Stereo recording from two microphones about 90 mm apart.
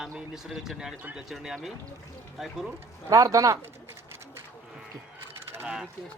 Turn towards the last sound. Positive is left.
turn(degrees=-30)  # may be behind; listen again after turning